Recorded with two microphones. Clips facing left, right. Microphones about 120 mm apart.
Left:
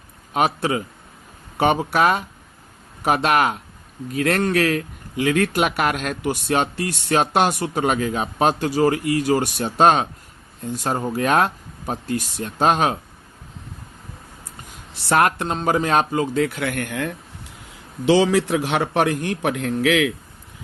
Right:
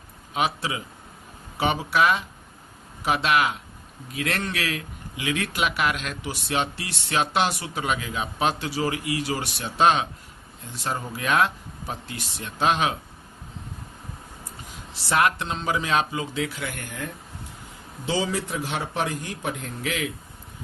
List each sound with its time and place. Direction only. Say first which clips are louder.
0.3 s a man's voice: left 6 dB; 50° left (ahead or behind)
15.1 s a man's voice: left 4 dB; 50° left (ahead or behind); by 20.1 s 80° left